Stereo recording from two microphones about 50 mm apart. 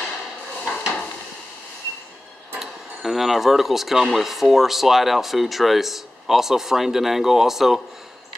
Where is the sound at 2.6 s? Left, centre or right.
Centre.